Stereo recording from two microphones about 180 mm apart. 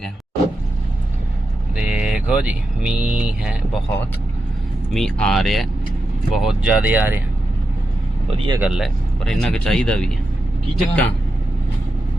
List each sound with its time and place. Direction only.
1.7 s speech: 5° right (ahead or behind)
4.9 s speech: 5° left (ahead or behind)
8.4 s speech: 25° right (ahead or behind)
8.6 s speech: centre (ahead or behind)